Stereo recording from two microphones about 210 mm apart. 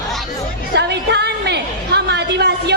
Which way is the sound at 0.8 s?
55° right (ahead or behind).